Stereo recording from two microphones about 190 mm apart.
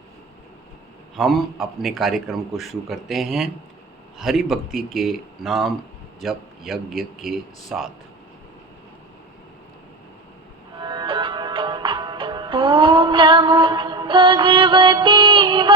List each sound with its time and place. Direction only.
1.1 s a man's voice: centre (ahead or behind)
10.8 s music: 25° right (ahead or behind)